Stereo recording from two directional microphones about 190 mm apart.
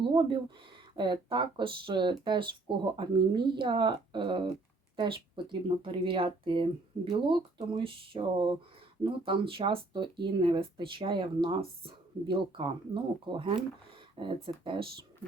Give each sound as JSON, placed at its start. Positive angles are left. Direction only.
{"t": 0.1, "sound": "speech", "side_deg": -25}